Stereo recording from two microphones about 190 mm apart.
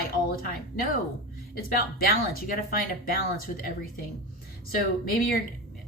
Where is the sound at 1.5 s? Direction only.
50° left (ahead or behind).